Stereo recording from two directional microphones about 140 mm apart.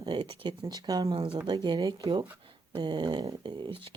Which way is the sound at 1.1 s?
40° right (ahead or behind).